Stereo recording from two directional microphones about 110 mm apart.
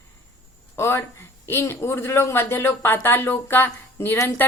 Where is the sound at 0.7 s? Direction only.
25° left (ahead or behind).